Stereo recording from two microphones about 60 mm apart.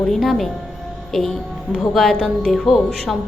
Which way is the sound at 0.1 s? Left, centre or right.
Centre.